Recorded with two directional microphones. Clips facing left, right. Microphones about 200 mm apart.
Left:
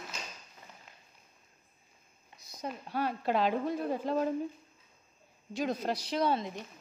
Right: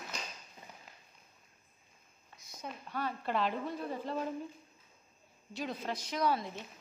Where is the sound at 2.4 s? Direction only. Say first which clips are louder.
Left 5 dB; 35° left (ahead or behind).